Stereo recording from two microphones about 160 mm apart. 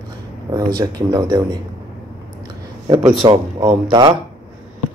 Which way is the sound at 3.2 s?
25° right (ahead or behind).